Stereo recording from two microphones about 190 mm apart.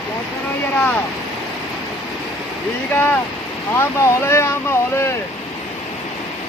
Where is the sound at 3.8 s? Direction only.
15° left (ahead or behind).